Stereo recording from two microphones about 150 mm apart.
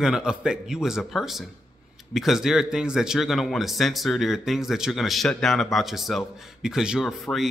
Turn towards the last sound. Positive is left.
turn(degrees=0)  # may be behind; listen again after turning